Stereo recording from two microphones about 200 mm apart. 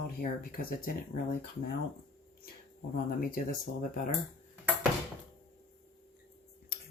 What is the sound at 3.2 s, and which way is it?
Speech, 45° left (ahead or behind).